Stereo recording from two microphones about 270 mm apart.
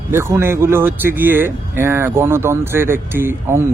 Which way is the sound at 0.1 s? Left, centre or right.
Centre.